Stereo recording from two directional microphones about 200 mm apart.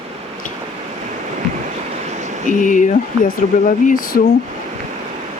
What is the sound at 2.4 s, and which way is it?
Speech, 40° left (ahead or behind).